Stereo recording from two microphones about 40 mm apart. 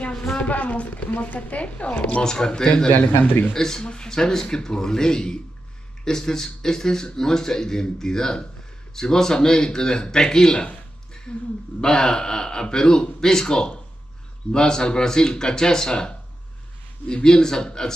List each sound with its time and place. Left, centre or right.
0.1 s a sound: centre
0.4 s a woman's voice: left
2.2 s a man's voice: centre
11.8 s a man's voice: centre